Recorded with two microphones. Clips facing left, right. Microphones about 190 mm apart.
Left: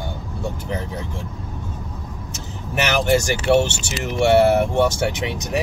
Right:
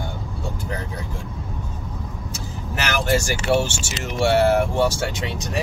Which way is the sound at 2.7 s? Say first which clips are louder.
Left 4 dB; 20° left (ahead or behind).